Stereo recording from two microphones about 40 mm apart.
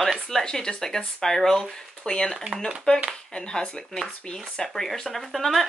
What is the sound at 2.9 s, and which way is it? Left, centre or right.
Speech, left.